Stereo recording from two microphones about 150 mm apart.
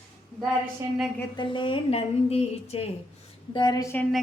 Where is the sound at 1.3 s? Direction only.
35° left (ahead or behind).